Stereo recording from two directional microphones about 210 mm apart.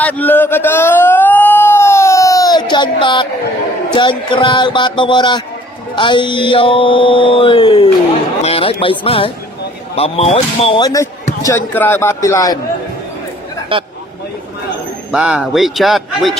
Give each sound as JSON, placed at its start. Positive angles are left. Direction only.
{"t": 0.0, "sound": "a sound", "side_deg": 10}
{"t": 3.9, "sound": "mantra", "side_deg": 20}
{"t": 9.9, "sound": "speech", "side_deg": 30}
{"t": 13.7, "sound": "speech", "side_deg": -25}
{"t": 15.1, "sound": "a man's voice", "side_deg": -5}